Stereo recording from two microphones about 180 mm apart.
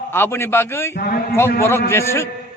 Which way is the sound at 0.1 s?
15° left (ahead or behind).